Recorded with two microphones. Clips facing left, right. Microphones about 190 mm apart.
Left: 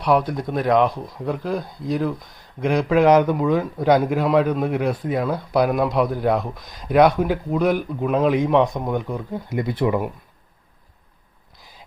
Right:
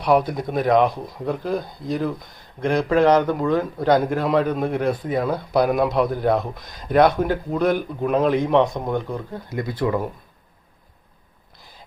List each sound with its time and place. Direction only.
0.0 s a man's voice: centre (ahead or behind)
9.5 s speech: 20° left (ahead or behind)